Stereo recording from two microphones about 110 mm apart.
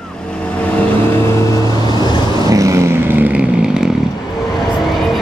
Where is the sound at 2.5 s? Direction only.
25° right (ahead or behind); by 3.8 s 10° right (ahead or behind).